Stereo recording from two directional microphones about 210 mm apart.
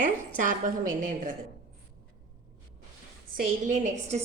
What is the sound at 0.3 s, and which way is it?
Speech, 40° right (ahead or behind).